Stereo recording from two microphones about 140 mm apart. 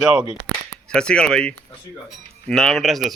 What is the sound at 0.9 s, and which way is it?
A man's voice, 5° left (ahead or behind).